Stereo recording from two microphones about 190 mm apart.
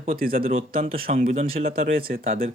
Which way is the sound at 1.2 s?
35° right (ahead or behind).